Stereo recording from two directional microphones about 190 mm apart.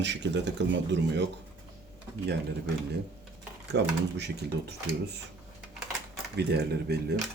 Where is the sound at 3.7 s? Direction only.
60° right (ahead or behind).